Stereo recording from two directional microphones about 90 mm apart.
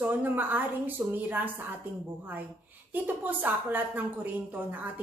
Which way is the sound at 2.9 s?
20° right (ahead or behind).